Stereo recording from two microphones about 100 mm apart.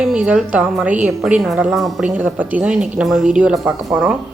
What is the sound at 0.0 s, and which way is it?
A woman's voice, 10° right (ahead or behind).